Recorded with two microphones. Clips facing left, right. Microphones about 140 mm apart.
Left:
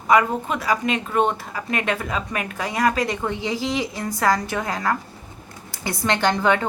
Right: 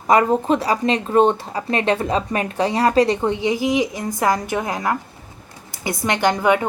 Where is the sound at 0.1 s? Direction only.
35° right (ahead or behind).